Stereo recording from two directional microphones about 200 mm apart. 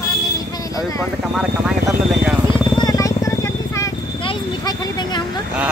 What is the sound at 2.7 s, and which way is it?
Vehicle, 20° left (ahead or behind).